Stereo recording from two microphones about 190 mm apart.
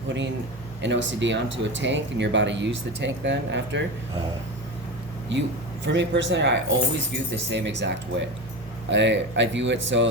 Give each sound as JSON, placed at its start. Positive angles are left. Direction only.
{"t": 0.8, "sound": "speech", "side_deg": -70}
{"t": 5.8, "sound": "speech", "side_deg": -70}